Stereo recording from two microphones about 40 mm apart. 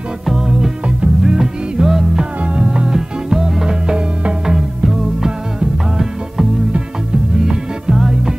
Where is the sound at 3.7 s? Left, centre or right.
Right.